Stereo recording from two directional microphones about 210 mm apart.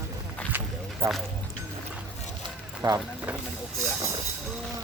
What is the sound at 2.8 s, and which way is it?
Speech, 10° right (ahead or behind).